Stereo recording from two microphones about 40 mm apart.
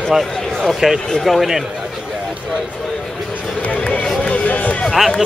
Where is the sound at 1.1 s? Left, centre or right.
Centre.